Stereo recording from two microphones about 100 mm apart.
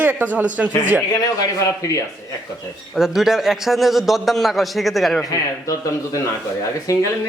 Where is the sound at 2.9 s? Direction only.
5° right (ahead or behind).